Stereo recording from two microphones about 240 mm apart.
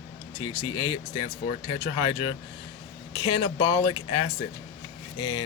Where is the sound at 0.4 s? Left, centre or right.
Centre.